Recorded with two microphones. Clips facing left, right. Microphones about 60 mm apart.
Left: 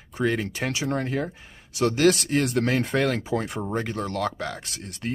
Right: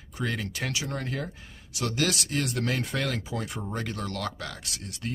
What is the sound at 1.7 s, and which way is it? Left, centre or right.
Speech, left.